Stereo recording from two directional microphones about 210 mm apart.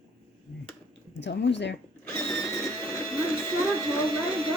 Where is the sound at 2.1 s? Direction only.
15° left (ahead or behind).